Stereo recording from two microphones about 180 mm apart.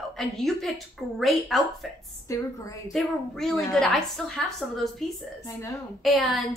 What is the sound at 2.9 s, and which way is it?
A woman's voice, centre (ahead or behind).